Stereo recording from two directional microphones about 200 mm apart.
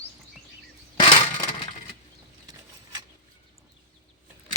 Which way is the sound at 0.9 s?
20° left (ahead or behind).